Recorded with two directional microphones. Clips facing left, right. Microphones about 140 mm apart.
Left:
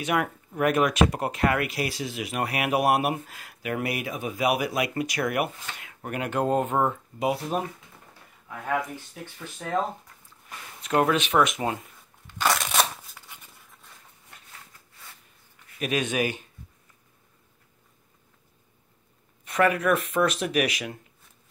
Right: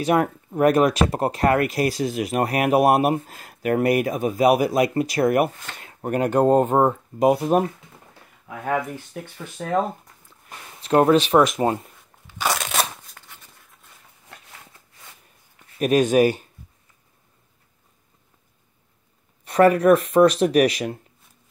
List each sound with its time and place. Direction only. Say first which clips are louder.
0.0 s speech: right 6 dB; 35° right (ahead or behind); by 9.7 s 60° right (ahead or behind)
10.8 s speech: right 7 dB; 35° right (ahead or behind)
12.3 s a sound: right 1 dB; 5° right (ahead or behind)
15.8 s speech: right 10 dB; 40° right (ahead or behind)
19.4 s speech: right 8 dB; 35° right (ahead or behind)